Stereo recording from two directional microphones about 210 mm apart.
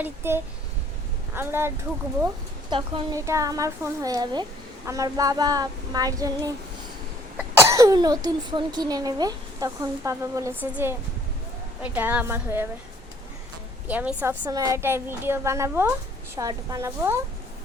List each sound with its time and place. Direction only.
0.0 s speech: 10° right (ahead or behind)
2.6 s speech: 25° right (ahead or behind)
13.8 s speech: 5° right (ahead or behind)